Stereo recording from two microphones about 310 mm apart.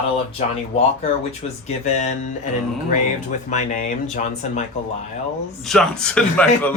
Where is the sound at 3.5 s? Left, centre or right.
Left.